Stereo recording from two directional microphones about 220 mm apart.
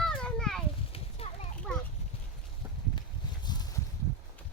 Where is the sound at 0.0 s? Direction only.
5° left (ahead or behind).